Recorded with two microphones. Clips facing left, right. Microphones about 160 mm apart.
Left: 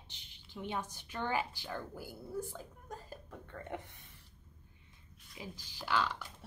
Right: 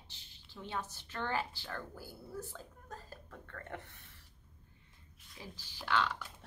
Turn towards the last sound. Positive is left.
turn(degrees=10)  # may be behind; listen again after turning